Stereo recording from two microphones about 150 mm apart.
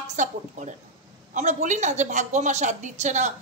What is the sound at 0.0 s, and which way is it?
A woman's voice, 50° right (ahead or behind).